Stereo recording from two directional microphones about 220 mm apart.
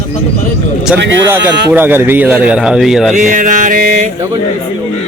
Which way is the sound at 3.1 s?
35° right (ahead or behind).